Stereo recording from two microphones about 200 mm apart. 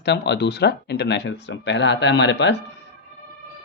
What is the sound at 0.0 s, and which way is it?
Speech, 55° left (ahead or behind).